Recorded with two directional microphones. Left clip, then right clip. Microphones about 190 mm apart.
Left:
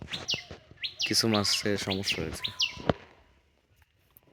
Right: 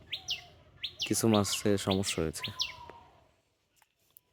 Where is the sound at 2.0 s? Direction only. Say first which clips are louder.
Left 2 dB; 35° right (ahead or behind).